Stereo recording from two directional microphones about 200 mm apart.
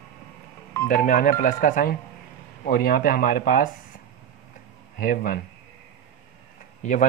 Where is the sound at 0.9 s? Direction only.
40° left (ahead or behind).